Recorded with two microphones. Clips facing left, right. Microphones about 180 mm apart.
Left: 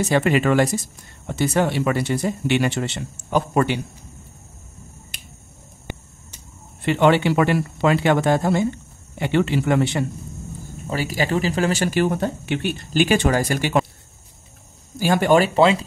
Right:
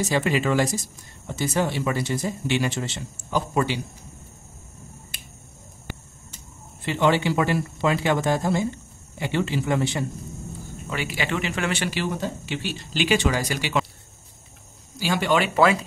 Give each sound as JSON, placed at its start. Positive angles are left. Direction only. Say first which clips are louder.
{"t": 0.0, "sound": "speech", "louder": "left 4 dB", "side_deg": 60}
{"t": 6.8, "sound": "speech", "louder": "left 5 dB", "side_deg": 60}
{"t": 10.9, "sound": "speech", "louder": "left 5 dB", "side_deg": 40}
{"t": 15.0, "sound": "speech", "louder": "left 6 dB", "side_deg": 50}
{"t": 15.5, "sound": "speech", "louder": "left 3 dB", "side_deg": 25}